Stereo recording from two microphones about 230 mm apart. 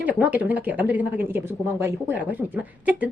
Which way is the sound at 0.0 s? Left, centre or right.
Centre.